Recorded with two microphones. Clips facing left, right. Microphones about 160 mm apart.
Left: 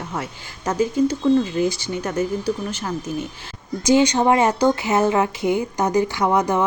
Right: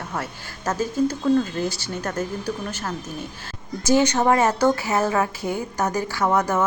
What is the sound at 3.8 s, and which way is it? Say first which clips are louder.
A woman's voice: left 2 dB; 15° left (ahead or behind).